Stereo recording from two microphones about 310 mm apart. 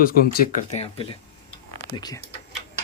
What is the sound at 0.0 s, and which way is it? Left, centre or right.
Speech, left.